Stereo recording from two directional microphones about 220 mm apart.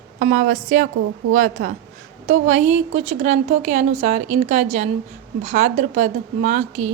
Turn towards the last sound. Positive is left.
turn(degrees=-35)  # may be behind; listen again after turning